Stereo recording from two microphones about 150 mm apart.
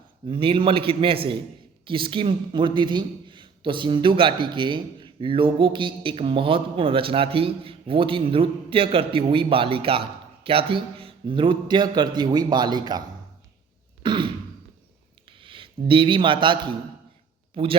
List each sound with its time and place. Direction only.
0.3 s a man's voice: 35° right (ahead or behind)
14.0 s throat clearing: 30° right (ahead or behind)
15.4 s speech: 35° right (ahead or behind)